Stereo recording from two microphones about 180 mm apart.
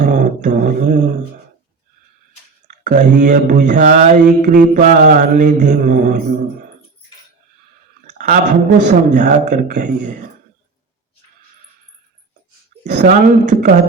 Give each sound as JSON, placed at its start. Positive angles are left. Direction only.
{"t": 0.0, "sound": "mantra", "side_deg": -50}
{"t": 2.8, "sound": "mantra", "side_deg": -45}
{"t": 8.0, "sound": "a sound", "side_deg": -50}
{"t": 8.8, "sound": "mantra", "side_deg": -45}
{"t": 12.8, "sound": "mantra", "side_deg": -45}